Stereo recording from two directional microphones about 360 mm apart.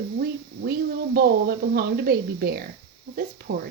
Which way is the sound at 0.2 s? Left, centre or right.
Right.